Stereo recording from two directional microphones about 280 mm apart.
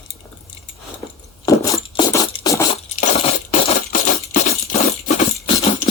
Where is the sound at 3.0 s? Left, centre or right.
Left.